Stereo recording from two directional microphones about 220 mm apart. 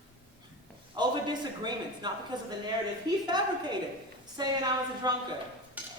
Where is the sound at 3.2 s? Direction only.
20° right (ahead or behind).